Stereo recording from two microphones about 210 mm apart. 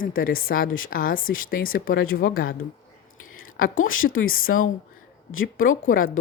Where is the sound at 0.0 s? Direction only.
45° left (ahead or behind).